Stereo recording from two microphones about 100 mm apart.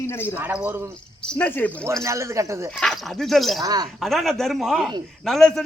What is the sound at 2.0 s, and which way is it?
Speech, 30° right (ahead or behind).